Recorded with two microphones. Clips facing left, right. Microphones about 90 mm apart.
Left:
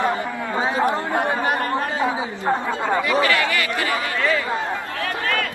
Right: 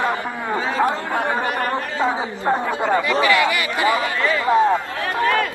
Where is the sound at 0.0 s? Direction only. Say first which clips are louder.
Even; 20° left (ahead or behind).